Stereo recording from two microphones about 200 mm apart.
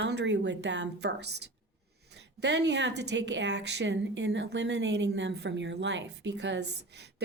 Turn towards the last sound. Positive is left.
turn(degrees=-55)  # may be behind; listen again after turning